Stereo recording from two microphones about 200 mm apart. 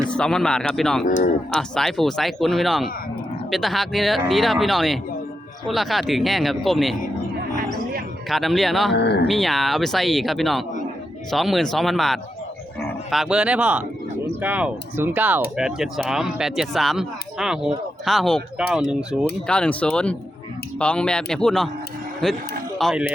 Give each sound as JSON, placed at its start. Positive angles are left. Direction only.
{"t": 0.1, "sound": "speech", "side_deg": 5}
{"t": 1.0, "sound": "speech", "side_deg": 40}
{"t": 1.5, "sound": "speech", "side_deg": 0}
{"t": 8.3, "sound": "speech", "side_deg": 0}
{"t": 8.9, "sound": "speech", "side_deg": 55}
{"t": 9.2, "sound": "speech", "side_deg": 0}